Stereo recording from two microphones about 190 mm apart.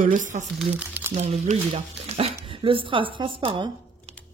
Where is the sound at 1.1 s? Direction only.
35° right (ahead or behind).